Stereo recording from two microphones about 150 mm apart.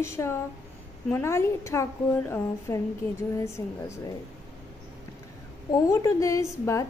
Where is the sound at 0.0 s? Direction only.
20° left (ahead or behind).